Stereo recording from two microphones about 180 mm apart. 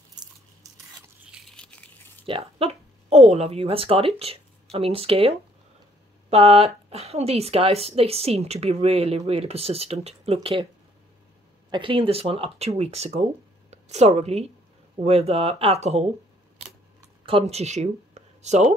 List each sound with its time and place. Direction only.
1.3 s a sound: centre (ahead or behind)
2.2 s speech: 30° right (ahead or behind)
6.3 s a woman's voice: 30° right (ahead or behind)
11.7 s a woman's voice: 25° right (ahead or behind)
17.3 s speech: 35° right (ahead or behind)